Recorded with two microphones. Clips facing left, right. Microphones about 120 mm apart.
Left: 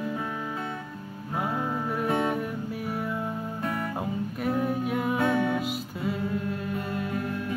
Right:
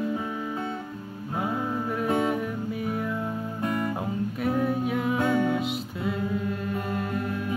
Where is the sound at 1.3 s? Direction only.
Centre (ahead or behind).